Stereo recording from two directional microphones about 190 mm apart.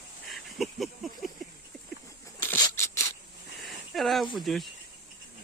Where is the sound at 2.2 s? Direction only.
15° left (ahead or behind).